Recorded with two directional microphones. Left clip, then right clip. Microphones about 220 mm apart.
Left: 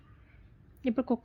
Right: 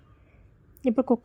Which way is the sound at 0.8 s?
15° right (ahead or behind).